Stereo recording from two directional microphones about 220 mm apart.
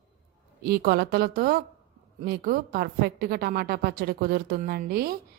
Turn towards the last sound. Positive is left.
turn(degrees=-45)  # may be behind; listen again after turning